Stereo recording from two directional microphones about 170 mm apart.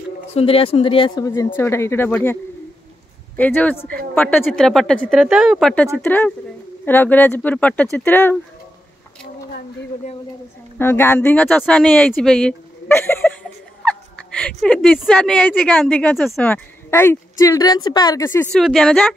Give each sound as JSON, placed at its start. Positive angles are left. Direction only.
{"t": 0.3, "sound": "speech", "side_deg": 35}
{"t": 3.3, "sound": "a woman's voice", "side_deg": 10}
{"t": 10.8, "sound": "a woman's voice", "side_deg": 15}
{"t": 14.3, "sound": "a woman's voice", "side_deg": 5}
{"t": 18.5, "sound": "a woman's voice", "side_deg": 5}